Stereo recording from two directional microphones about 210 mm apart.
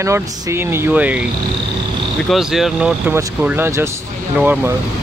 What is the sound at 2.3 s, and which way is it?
Speech, centre (ahead or behind).